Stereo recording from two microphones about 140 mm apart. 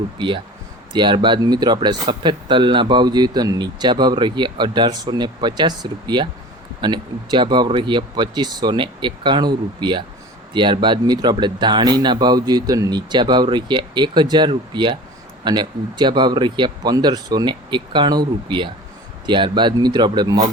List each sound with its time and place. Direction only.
0.2 s speech: 35° right (ahead or behind)